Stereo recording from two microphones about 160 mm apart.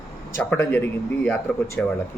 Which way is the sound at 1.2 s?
10° left (ahead or behind).